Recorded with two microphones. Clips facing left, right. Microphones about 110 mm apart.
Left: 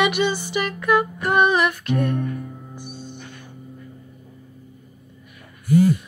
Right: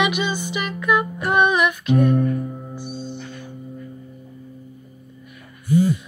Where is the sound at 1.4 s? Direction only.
35° left (ahead or behind).